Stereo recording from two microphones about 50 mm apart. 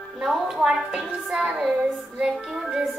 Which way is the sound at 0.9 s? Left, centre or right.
Centre.